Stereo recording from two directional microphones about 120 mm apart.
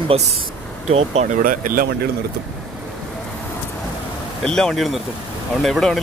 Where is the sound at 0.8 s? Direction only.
65° right (ahead or behind).